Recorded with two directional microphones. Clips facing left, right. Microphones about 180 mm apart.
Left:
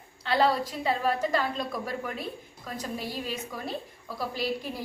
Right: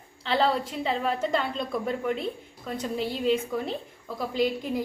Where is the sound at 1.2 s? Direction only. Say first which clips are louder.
Right 1 dB; 25° right (ahead or behind).